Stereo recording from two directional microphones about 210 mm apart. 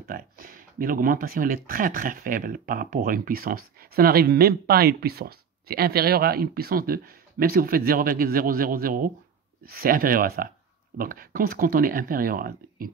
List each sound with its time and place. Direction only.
0.1 s speech: 45° right (ahead or behind)